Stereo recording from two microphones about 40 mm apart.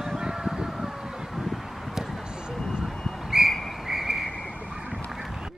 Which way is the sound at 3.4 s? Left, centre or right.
Centre.